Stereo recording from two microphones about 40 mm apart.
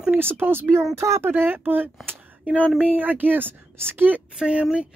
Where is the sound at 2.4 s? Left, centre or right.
Right.